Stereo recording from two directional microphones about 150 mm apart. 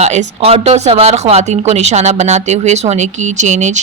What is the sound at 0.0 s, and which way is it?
Speech, 50° right (ahead or behind).